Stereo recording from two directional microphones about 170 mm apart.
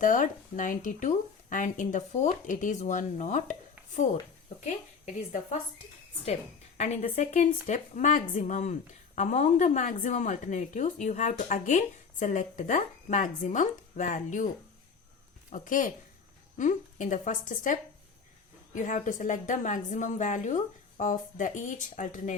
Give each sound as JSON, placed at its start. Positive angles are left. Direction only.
{"t": 0.0, "sound": "a woman's voice", "side_deg": 50}
{"t": 6.7, "sound": "a woman's voice", "side_deg": 40}
{"t": 15.5, "sound": "a woman's voice", "side_deg": 50}